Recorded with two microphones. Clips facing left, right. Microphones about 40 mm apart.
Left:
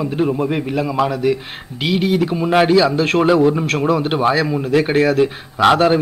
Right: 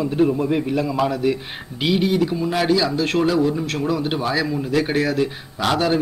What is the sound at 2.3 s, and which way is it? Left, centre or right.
A man's voice, left.